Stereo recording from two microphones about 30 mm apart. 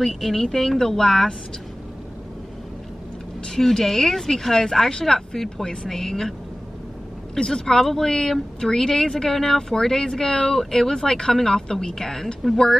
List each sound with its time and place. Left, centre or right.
0.0 s speech: centre
3.5 s speech: centre
7.3 s speech: left